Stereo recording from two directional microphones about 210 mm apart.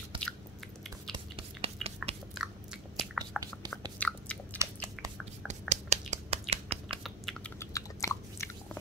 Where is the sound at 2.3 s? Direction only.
Centre (ahead or behind).